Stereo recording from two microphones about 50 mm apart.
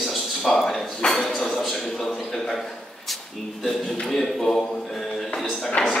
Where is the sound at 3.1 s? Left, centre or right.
Centre.